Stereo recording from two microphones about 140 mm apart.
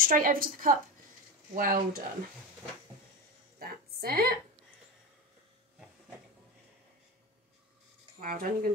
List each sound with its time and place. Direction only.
0.0 s a woman's voice: 90° right
3.5 s a woman's voice: 90° right
8.2 s a woman's voice: 90° right